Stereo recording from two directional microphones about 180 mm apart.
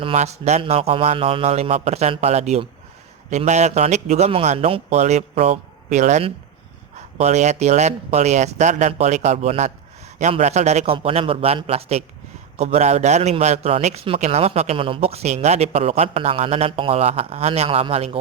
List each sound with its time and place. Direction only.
0.0 s a man's voice: 35° right (ahead or behind)